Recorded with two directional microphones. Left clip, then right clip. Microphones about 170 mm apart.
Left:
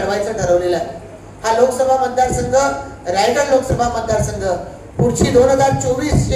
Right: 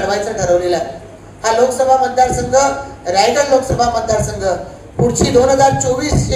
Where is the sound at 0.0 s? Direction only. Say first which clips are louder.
Right 2 dB; 20° right (ahead or behind).